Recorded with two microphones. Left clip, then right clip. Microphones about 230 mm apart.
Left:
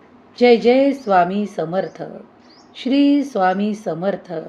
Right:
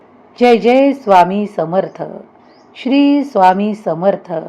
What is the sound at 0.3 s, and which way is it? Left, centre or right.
A woman's voice, centre.